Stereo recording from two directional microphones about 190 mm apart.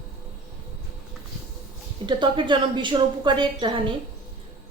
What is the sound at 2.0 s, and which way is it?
A woman's voice, 25° right (ahead or behind).